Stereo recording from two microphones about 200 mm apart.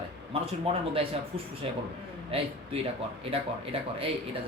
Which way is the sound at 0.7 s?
30° right (ahead or behind).